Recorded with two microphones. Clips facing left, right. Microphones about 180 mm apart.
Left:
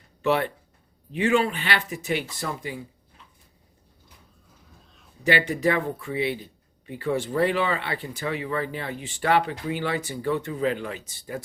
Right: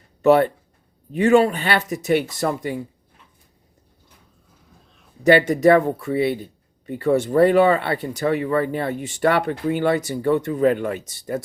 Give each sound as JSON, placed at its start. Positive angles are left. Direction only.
{"t": 0.2, "sound": "speech", "side_deg": -45}
{"t": 5.2, "sound": "speech", "side_deg": -45}